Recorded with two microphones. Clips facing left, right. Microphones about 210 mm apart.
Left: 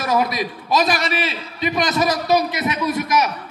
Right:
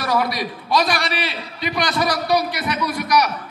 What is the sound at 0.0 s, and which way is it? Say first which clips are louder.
A man's voice: left 1 dB; 20° left (ahead or behind).